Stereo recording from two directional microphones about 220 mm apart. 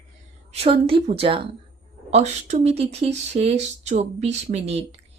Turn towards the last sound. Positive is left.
turn(degrees=-30)  # may be behind; listen again after turning